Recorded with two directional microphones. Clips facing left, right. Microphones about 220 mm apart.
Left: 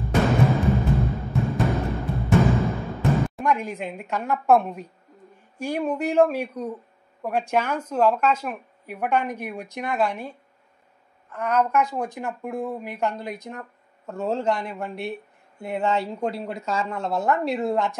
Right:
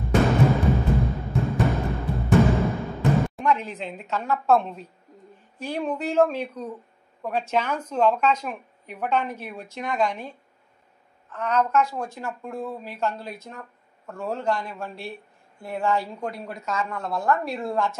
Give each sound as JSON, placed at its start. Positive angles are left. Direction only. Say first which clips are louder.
{"t": 0.0, "sound": "timpani", "louder": "right 1 dB", "side_deg": 0}
{"t": 3.4, "sound": "a woman's voice", "louder": "even", "side_deg": 10}